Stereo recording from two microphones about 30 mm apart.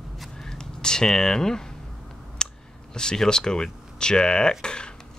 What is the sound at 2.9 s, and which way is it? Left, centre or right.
Speech, left.